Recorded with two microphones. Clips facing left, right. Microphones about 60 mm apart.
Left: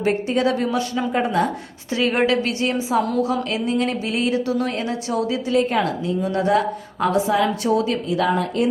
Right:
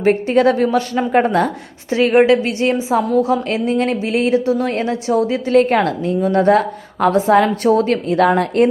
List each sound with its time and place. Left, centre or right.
0.0 s a woman's voice: right
1.9 s a woman's voice: right
5.5 s a woman's voice: right